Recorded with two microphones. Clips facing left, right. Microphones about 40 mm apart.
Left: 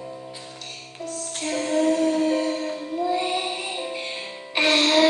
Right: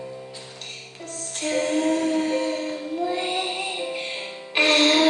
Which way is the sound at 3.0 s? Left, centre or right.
Right.